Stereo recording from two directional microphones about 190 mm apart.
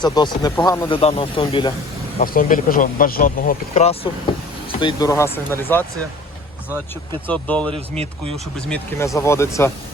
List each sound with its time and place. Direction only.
0.0 s speech: 20° left (ahead or behind)
2.2 s speech: 50° left (ahead or behind)
4.8 s speech: 20° left (ahead or behind)
7.3 s speech: 5° left (ahead or behind)
8.7 s speech: 15° left (ahead or behind)